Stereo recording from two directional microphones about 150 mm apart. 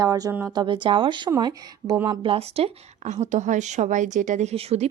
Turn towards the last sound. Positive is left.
turn(degrees=-45)  # may be behind; listen again after turning